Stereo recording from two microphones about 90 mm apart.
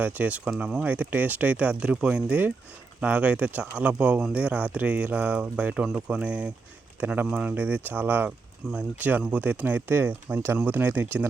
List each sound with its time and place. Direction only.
0.0 s speech: 15° right (ahead or behind)